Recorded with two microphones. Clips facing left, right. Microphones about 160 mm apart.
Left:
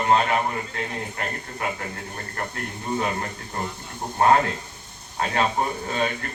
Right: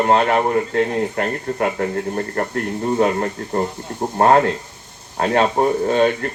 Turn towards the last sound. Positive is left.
turn(degrees=-45)  # may be behind; listen again after turning